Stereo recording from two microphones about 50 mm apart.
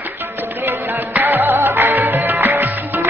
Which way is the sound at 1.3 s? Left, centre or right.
Right.